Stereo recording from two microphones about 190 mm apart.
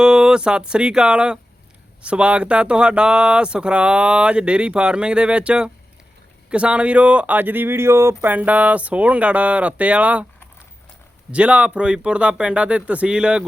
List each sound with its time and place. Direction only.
0.0 s speech: 5° right (ahead or behind)
11.3 s speech: 5° right (ahead or behind)